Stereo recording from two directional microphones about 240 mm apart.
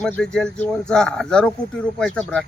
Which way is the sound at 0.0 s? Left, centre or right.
Centre.